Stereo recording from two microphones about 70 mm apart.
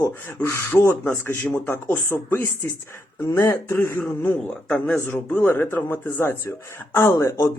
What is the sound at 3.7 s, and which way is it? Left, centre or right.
Speech, left.